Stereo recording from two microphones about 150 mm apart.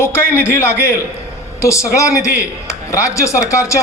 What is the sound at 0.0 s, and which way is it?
A man's voice, 15° left (ahead or behind).